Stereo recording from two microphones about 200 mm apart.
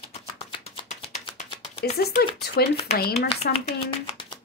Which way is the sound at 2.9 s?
50° left (ahead or behind).